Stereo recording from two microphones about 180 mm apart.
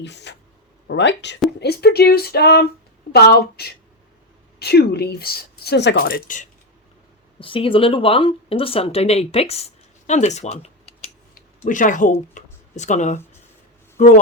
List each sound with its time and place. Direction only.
0.0 s speech: 75° left (ahead or behind)
1.5 s speech: 65° left (ahead or behind); by 6.5 s 45° left (ahead or behind)
7.3 s a man's voice: 30° left (ahead or behind); by 14.1 s 45° left (ahead or behind)